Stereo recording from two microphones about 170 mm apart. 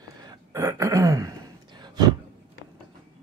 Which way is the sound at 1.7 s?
25° right (ahead or behind).